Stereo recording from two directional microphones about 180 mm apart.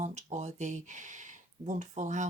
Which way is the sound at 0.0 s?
40° right (ahead or behind).